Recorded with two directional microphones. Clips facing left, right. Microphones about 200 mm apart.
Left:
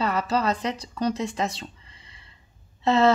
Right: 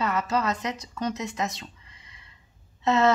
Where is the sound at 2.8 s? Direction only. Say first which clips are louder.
Left 2 dB; 30° left (ahead or behind).